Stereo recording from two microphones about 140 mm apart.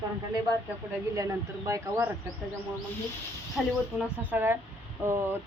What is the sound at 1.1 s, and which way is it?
Speech, 25° right (ahead or behind).